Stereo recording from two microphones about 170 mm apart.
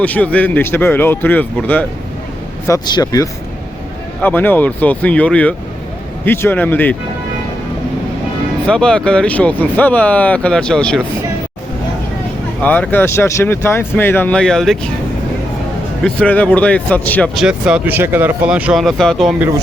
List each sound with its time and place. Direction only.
0.0 s speech: 10° left (ahead or behind)
2.6 s speech: 20° left (ahead or behind)
4.2 s speech: 10° left (ahead or behind)
8.6 s speech: 5° left (ahead or behind)
12.6 s speech: 10° left (ahead or behind)
16.0 s speech: 10° left (ahead or behind)
17.3 s speech: 5° right (ahead or behind)